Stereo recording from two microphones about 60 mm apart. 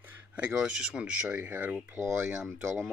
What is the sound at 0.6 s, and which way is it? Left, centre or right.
Speech, centre.